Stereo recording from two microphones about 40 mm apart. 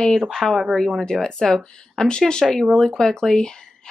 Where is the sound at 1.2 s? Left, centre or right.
Centre.